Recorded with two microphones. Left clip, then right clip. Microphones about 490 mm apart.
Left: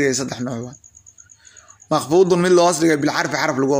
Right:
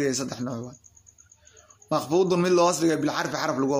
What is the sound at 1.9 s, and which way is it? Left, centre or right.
Speech, left.